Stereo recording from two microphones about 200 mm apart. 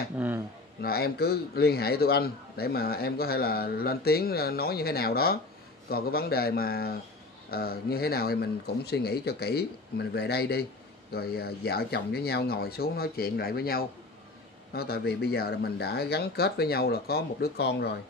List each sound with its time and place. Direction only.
0.8 s a man's voice: 50° left (ahead or behind)